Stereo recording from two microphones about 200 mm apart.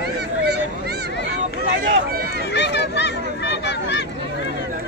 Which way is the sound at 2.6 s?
60° left (ahead or behind).